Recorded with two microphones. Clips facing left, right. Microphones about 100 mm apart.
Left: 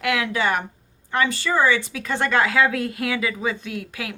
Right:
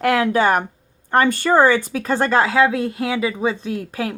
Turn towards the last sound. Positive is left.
turn(degrees=-35)  # may be behind; listen again after turning